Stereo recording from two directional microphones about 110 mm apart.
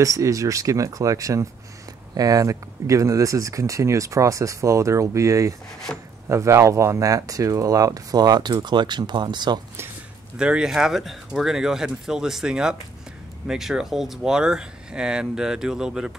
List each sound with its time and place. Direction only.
0.0 s speech: 30° right (ahead or behind)
5.9 s speech: 10° left (ahead or behind)
6.2 s speech: 25° right (ahead or behind); by 9.6 s 40° right (ahead or behind)
10.3 s speech: 5° right (ahead or behind)